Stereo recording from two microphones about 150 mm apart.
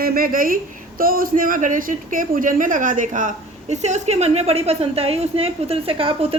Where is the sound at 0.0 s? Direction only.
75° right (ahead or behind).